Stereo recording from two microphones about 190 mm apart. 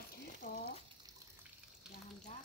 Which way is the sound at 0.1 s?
55° left (ahead or behind).